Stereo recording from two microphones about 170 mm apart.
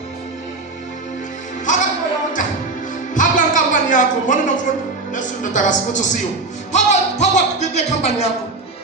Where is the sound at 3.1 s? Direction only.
50° left (ahead or behind).